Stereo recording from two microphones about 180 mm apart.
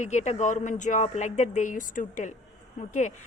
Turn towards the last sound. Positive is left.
turn(degrees=40)  # may be behind; listen again after turning